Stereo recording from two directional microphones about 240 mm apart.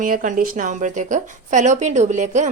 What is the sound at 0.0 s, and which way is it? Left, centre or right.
Speech, right.